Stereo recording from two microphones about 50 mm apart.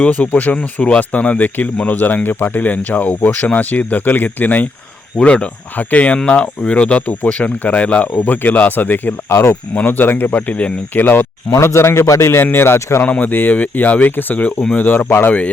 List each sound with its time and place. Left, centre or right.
0.0 s speech: left
5.2 s speech: left
9.3 s speech: left
9.7 s speech: left
11.5 s a man's voice: left
12.4 s speech: left
13.0 s speech: left